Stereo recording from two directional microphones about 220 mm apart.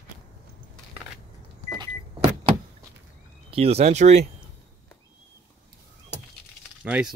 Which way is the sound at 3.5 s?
30° right (ahead or behind).